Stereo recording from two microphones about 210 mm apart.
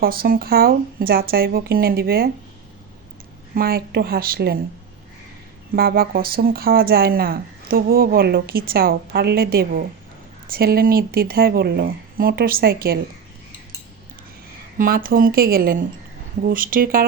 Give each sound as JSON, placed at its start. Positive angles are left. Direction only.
{"t": 0.0, "sound": "speech", "side_deg": -45}
{"t": 3.5, "sound": "speech", "side_deg": -45}
{"t": 5.7, "sound": "speech", "side_deg": -45}
{"t": 14.8, "sound": "speech", "side_deg": -45}